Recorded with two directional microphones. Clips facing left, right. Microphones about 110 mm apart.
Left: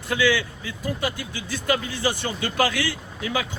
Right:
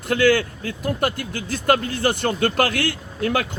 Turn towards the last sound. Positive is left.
turn(degrees=-55)  # may be behind; listen again after turning